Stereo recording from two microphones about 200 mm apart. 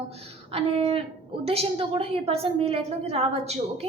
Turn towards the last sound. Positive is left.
turn(degrees=-30)  # may be behind; listen again after turning